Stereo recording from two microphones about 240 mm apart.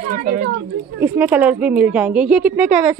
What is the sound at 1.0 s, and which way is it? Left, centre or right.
Speech, centre.